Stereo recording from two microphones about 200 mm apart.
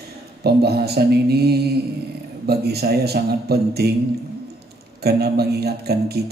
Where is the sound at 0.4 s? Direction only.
55° right (ahead or behind).